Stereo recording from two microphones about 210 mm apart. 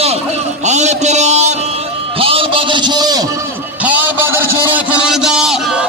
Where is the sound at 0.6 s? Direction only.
35° right (ahead or behind).